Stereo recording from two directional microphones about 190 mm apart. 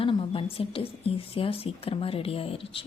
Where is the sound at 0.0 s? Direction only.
30° left (ahead or behind).